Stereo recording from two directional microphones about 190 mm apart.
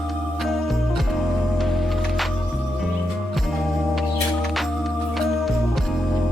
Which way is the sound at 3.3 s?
Centre (ahead or behind).